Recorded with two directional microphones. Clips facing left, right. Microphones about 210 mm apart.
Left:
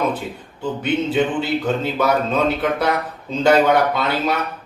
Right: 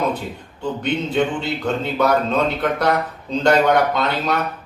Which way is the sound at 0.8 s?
5° left (ahead or behind).